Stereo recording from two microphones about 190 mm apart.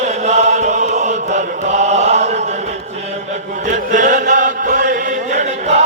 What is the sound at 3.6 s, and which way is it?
Chant, 40° right (ahead or behind).